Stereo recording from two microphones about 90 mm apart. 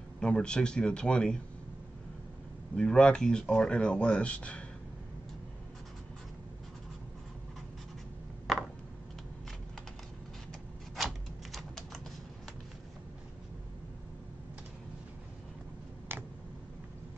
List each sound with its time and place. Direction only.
0.2 s speech: 10° left (ahead or behind)
2.7 s speech: 10° left (ahead or behind)
11.0 s typewriter: centre (ahead or behind)
16.1 s a sound: 25° right (ahead or behind)